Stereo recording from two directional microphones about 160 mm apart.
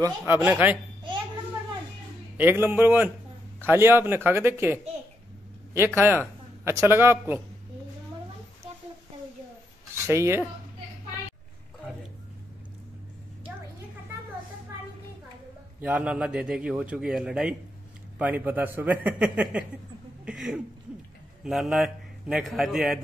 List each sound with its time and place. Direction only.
0.2 s speech: 10° right (ahead or behind)
2.3 s speech: 15° right (ahead or behind)
5.9 s speech: 15° right (ahead or behind)
10.0 s speech: 15° right (ahead or behind)
15.8 s a man's voice: 5° right (ahead or behind)